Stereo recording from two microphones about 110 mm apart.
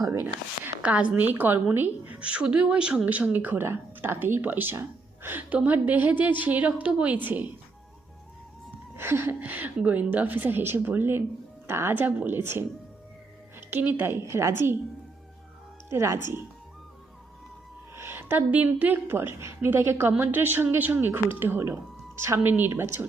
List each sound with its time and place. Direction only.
0.8 s a woman's voice: 10° right (ahead or behind)
9.0 s a woman's voice: 20° right (ahead or behind)
15.9 s a woman's voice: 25° right (ahead or behind)
17.9 s a woman's voice: 20° right (ahead or behind)